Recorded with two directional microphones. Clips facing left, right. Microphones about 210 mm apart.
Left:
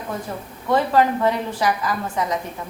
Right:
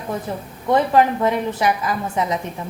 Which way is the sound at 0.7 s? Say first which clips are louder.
Right 2 dB; 20° right (ahead or behind).